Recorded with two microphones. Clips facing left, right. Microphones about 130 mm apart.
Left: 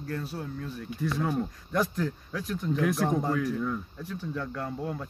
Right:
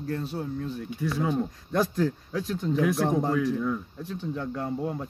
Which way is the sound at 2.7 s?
5° right (ahead or behind).